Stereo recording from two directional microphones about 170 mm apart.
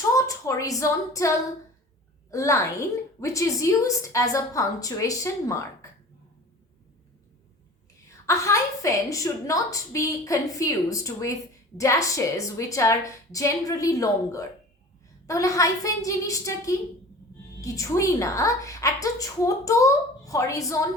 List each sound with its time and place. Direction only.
0.2 s a woman's voice: 20° left (ahead or behind)
2.3 s a woman's voice: 20° left (ahead or behind)
8.3 s a woman's voice: 15° left (ahead or behind)